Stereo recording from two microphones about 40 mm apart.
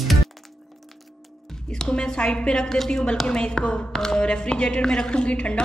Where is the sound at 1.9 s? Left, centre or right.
Left.